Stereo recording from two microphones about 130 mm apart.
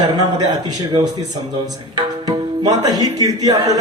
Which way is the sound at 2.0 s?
30° right (ahead or behind).